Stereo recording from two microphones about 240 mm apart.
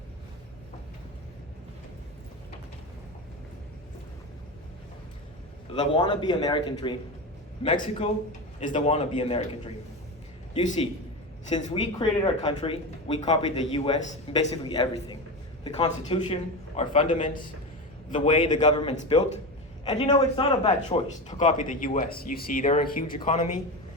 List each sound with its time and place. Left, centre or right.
5.7 s speech: centre
7.8 s speech: left
11.5 s a man's voice: left